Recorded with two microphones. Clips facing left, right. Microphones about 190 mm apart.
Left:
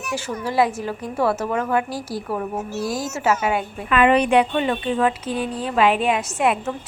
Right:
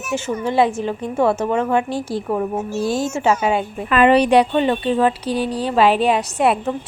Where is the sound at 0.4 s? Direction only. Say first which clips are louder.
Right 2 dB; 25° right (ahead or behind).